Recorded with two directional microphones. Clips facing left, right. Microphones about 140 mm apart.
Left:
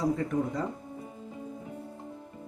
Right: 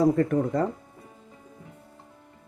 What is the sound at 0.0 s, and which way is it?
Speech, 55° right (ahead or behind).